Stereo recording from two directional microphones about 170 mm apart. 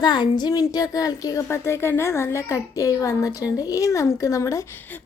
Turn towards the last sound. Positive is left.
turn(degrees=10)  # may be behind; listen again after turning